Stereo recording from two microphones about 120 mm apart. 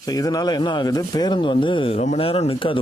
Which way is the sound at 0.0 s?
30° left (ahead or behind).